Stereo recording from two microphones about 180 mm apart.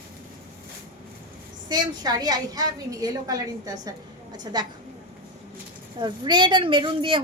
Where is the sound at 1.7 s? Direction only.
20° right (ahead or behind).